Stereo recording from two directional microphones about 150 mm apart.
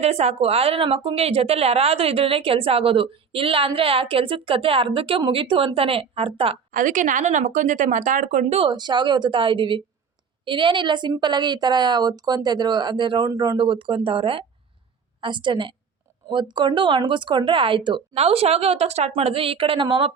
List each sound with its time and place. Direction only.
0.0 s speech: 45° right (ahead or behind)
6.7 s speech: 60° right (ahead or behind); by 8.7 s 45° right (ahead or behind)
8.7 s a woman's voice: 30° right (ahead or behind)